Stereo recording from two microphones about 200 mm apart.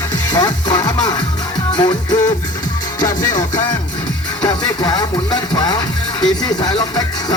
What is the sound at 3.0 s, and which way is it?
Music, 15° left (ahead or behind).